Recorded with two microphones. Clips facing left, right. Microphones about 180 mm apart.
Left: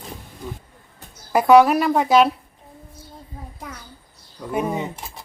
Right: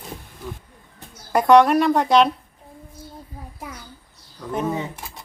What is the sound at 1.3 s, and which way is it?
Speech, 5° left (ahead or behind).